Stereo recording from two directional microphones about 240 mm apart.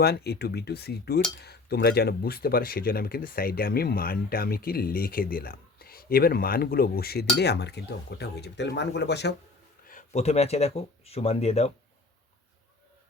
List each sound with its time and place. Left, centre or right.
0.0 s speech: left
9.8 s speech: left